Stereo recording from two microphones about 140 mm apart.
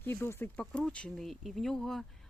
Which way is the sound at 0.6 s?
5° left (ahead or behind).